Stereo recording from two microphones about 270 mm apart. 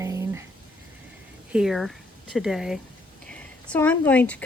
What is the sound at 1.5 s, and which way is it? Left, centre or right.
Speech, centre.